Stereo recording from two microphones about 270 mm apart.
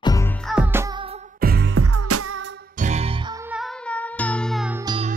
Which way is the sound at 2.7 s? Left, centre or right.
Right.